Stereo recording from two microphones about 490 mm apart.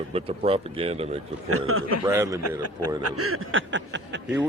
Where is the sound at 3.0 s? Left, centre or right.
Right.